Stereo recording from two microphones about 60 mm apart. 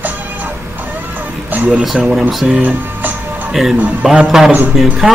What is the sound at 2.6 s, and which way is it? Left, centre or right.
Speech, right.